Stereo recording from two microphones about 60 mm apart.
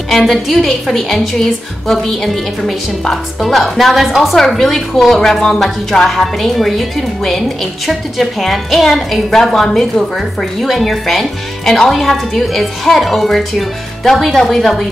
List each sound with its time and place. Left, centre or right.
0.1 s a woman's voice: centre